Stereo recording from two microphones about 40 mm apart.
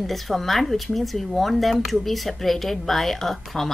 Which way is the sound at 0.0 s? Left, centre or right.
Centre.